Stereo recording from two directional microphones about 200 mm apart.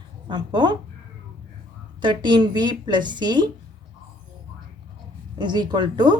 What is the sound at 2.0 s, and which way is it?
A woman's voice, 25° right (ahead or behind).